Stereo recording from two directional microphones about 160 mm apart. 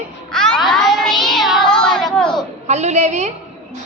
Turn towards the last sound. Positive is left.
turn(degrees=-45)  # may be behind; listen again after turning